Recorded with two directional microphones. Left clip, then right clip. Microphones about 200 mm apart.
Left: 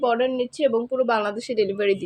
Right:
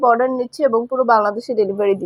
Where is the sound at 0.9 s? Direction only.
10° left (ahead or behind).